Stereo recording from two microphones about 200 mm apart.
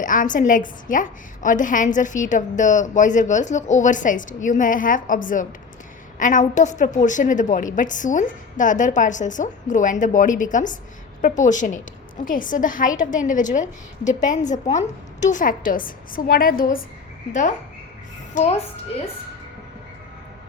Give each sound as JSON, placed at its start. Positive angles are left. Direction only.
{"t": 0.0, "sound": "a woman's voice", "side_deg": 40}
{"t": 18.3, "sound": "a woman's voice", "side_deg": 30}